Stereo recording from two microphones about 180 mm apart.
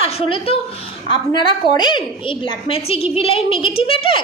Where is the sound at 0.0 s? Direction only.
30° left (ahead or behind).